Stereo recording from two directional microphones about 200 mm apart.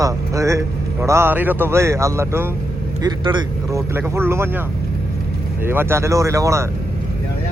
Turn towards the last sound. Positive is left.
turn(degrees=-15)  # may be behind; listen again after turning